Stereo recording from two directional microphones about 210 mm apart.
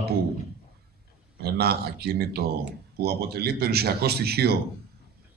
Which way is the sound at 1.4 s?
50° right (ahead or behind).